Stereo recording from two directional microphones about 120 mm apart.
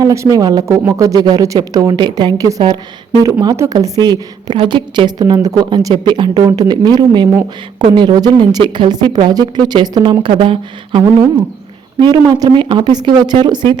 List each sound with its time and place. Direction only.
0.0 s a woman's voice: 25° right (ahead or behind)